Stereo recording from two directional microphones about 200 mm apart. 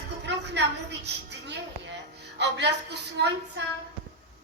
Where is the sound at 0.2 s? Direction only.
60° right (ahead or behind).